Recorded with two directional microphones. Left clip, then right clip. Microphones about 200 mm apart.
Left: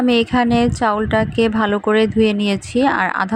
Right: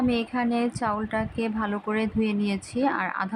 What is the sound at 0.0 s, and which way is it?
Speech, 25° left (ahead or behind).